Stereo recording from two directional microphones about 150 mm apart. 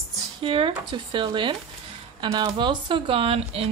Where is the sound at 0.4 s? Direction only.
35° right (ahead or behind).